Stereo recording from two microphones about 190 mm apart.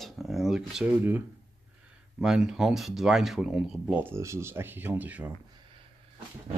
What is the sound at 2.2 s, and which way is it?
Speech, 5° right (ahead or behind).